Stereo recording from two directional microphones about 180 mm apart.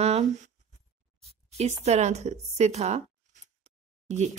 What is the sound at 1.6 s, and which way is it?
Speech, 40° right (ahead or behind).